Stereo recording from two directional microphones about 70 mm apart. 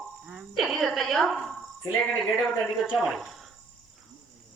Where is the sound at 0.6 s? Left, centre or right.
Centre.